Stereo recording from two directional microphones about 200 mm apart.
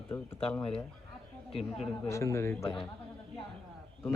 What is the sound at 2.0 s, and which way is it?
Speech, 15° left (ahead or behind).